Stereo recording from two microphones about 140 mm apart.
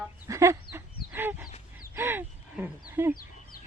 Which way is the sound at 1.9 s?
15° right (ahead or behind).